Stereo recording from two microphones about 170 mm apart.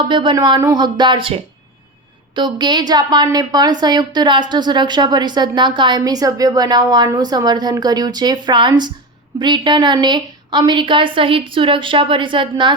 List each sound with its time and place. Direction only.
0.1 s speech: 30° right (ahead or behind)